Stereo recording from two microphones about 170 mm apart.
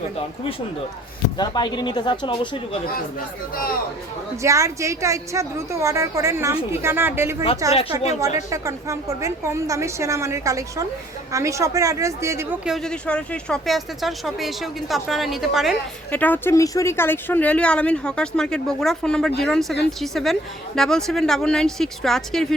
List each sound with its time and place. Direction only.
1.4 s speech: 25° left (ahead or behind)
3.5 s speech: 60° left (ahead or behind)
4.4 s a woman's voice: 20° right (ahead or behind)
12.6 s a woman's voice: centre (ahead or behind)
16.1 s a woman's voice: 10° left (ahead or behind)